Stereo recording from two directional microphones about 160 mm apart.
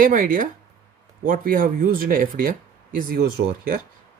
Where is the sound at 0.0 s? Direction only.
60° right (ahead or behind).